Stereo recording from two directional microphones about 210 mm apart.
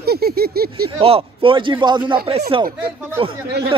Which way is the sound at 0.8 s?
25° right (ahead or behind).